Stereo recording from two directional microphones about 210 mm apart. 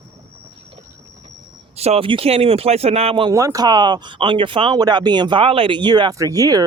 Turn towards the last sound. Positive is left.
turn(degrees=-15)  # may be behind; listen again after turning